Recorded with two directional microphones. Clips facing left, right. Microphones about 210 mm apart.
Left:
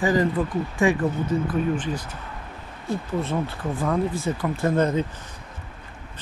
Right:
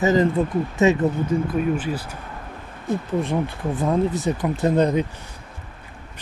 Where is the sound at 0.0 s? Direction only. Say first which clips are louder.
Right 3 dB; 25° right (ahead or behind).